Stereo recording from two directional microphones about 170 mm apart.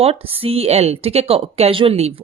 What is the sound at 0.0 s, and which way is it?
A woman's voice, 35° right (ahead or behind).